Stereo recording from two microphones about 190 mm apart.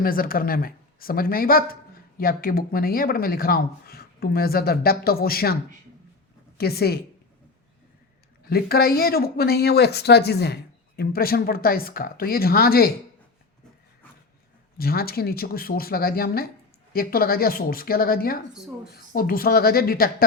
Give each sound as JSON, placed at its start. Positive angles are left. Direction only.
{"t": 0.0, "sound": "speech", "side_deg": 50}
{"t": 6.6, "sound": "a woman's voice", "side_deg": 55}
{"t": 8.4, "sound": "speech", "side_deg": 55}
{"t": 14.8, "sound": "speech", "side_deg": 50}